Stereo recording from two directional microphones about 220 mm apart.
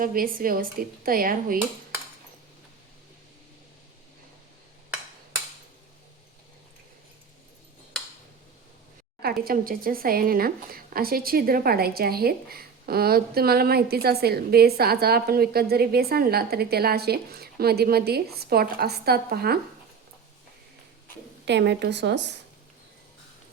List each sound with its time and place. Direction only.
0.0 s speech: 40° right (ahead or behind)
9.2 s a woman's voice: 45° right (ahead or behind)
21.4 s a woman's voice: 50° right (ahead or behind)